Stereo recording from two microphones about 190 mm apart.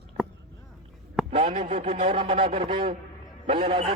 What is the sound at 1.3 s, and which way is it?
A man's voice, 35° right (ahead or behind).